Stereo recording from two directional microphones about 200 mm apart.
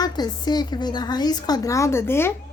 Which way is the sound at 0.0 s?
20° left (ahead or behind).